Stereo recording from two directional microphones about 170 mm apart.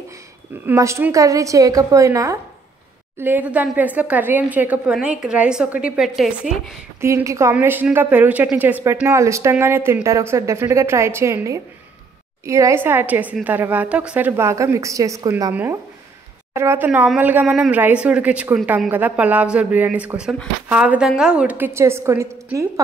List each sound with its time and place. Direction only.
0.7 s a woman's voice: 15° right (ahead or behind); by 6.8 s centre (ahead or behind)
7.0 s a woman's voice: 15° right (ahead or behind)